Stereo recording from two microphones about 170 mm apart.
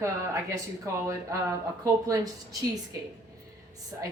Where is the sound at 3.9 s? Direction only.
15° right (ahead or behind).